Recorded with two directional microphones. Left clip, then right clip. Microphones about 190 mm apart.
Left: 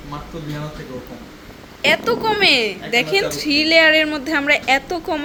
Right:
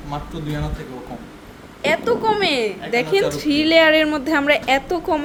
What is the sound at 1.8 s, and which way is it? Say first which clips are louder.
A woman's voice: left 1 dB; 5° right (ahead or behind).